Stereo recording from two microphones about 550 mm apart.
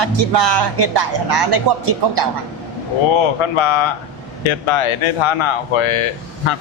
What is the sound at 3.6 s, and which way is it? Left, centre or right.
Speech, left.